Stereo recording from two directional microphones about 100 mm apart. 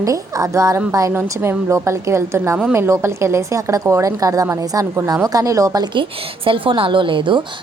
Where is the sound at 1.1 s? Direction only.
20° right (ahead or behind).